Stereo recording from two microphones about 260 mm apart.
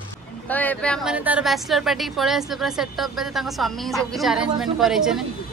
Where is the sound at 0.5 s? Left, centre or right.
Centre.